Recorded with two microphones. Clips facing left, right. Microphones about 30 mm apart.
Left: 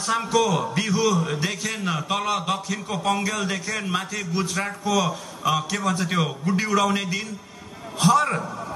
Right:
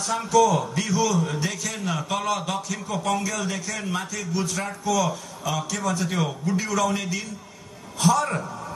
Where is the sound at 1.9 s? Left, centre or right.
Centre.